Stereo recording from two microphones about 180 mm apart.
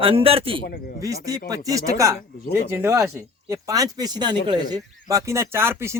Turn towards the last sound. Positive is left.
turn(degrees=-15)  # may be behind; listen again after turning